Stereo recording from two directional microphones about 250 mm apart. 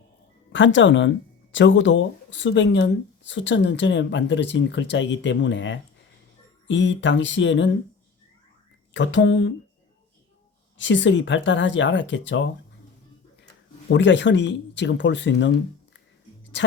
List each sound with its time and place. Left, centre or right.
0.5 s speech: left
8.9 s speech: left
10.8 s speech: left
13.9 s a woman's voice: left